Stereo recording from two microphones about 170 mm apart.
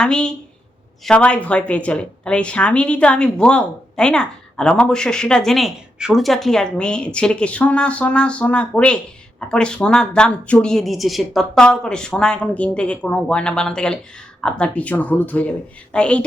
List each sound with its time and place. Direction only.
0.0 s a woman's voice: 5° left (ahead or behind)